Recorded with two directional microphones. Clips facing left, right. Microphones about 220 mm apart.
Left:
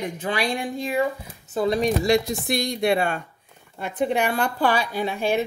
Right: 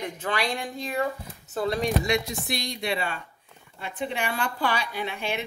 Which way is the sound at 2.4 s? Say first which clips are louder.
Left 8 dB; 50° left (ahead or behind).